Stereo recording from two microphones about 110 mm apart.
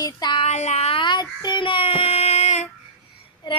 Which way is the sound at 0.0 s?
40° left (ahead or behind).